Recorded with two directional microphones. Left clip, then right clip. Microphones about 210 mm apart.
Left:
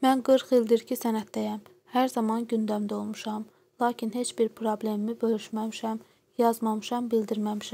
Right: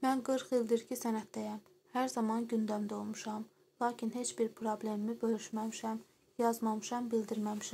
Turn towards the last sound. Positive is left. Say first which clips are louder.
# left 8 dB
turn(degrees=30)  # may be behind; listen again after turning